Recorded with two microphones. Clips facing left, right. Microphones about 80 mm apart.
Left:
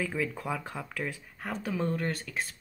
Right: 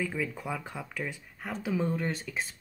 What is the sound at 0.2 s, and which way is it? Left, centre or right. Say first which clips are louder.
Speech: left 1 dB; centre.